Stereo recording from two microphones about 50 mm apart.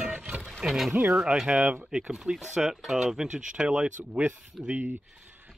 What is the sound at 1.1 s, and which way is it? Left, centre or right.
Speech, centre.